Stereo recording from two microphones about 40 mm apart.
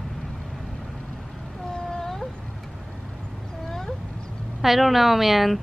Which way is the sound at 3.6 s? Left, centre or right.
Centre.